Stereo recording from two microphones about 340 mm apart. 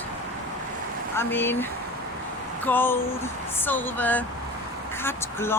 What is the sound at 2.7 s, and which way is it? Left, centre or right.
Speech, centre.